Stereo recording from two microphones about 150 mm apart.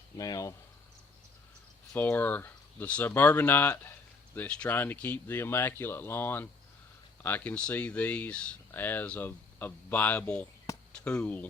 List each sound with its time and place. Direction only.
0.2 s speech: 25° left (ahead or behind)
1.9 s speech: 10° left (ahead or behind)